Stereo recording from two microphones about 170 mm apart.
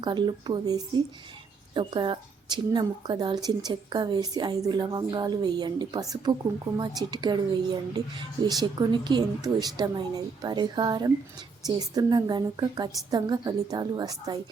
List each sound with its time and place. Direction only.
0.0 s a woman's voice: 25° right (ahead or behind)